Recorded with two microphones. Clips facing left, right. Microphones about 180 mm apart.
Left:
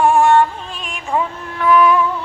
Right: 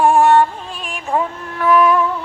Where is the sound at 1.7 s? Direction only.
45° right (ahead or behind).